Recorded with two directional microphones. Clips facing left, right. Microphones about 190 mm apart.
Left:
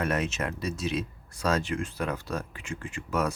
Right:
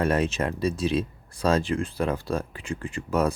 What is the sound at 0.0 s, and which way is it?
Speech, 30° right (ahead or behind).